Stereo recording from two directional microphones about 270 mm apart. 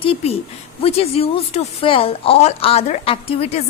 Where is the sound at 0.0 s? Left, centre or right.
Centre.